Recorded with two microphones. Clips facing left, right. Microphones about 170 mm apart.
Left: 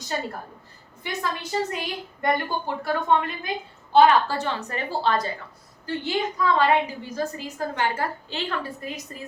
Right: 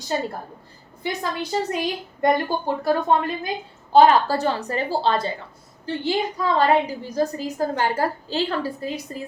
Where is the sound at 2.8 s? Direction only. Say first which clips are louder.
Right 2 dB; 35° right (ahead or behind).